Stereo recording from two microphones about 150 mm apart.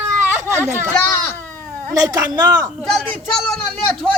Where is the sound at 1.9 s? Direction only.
25° right (ahead or behind).